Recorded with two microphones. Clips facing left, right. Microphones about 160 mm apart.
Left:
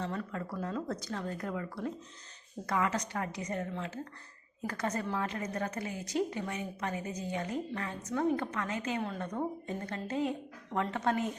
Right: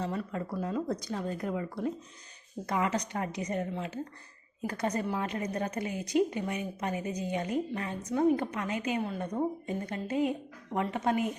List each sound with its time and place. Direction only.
0.0 s a woman's voice: 15° right (ahead or behind)